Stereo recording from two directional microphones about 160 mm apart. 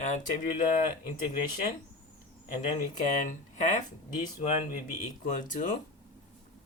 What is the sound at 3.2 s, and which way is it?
Speech, 50° left (ahead or behind).